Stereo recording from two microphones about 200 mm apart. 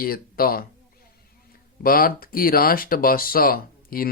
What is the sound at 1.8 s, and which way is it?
Speech, 45° left (ahead or behind).